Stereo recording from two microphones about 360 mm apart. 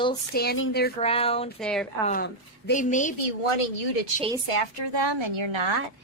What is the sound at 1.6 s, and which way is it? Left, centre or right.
Speech, centre.